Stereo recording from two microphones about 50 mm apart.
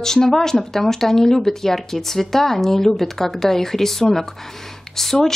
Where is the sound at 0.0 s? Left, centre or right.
Centre.